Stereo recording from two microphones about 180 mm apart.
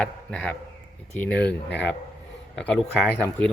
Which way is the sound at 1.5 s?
75° left (ahead or behind).